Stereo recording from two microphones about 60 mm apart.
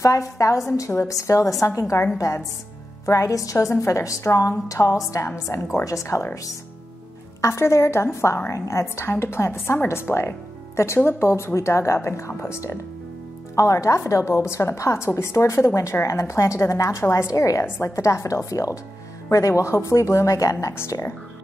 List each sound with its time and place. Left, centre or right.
0.0 s a woman's voice: left
0.7 s a woman's voice: left
7.4 s a woman's voice: left
13.6 s a woman's voice: left